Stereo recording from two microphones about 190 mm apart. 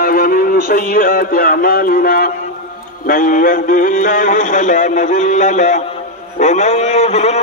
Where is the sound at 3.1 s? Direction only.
45° left (ahead or behind).